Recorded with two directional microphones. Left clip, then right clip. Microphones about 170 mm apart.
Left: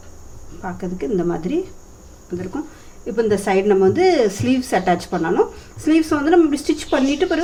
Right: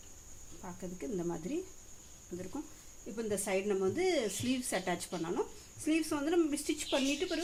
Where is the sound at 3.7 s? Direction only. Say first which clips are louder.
Left 18 dB; 50° right (ahead or behind).